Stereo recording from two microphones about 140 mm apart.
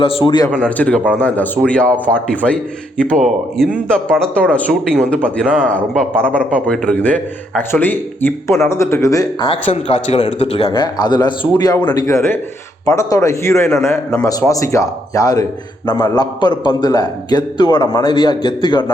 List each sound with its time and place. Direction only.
0.0 s a man's voice: 40° left (ahead or behind)
0.6 s a man's voice: 10° left (ahead or behind)
3.9 s a man's voice: 5° left (ahead or behind); by 9.5 s 25° left (ahead or behind)
9.5 s a man's voice: 40° left (ahead or behind)
10.7 s a man's voice: 30° left (ahead or behind)